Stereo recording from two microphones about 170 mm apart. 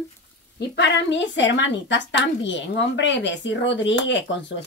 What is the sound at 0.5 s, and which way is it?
A woman's voice, 90° left.